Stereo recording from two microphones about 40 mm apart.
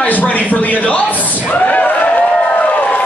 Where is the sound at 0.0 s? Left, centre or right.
Left.